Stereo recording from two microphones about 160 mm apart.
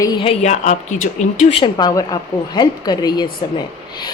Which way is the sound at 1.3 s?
35° left (ahead or behind).